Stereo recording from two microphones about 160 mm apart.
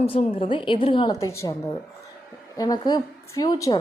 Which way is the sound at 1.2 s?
20° left (ahead or behind).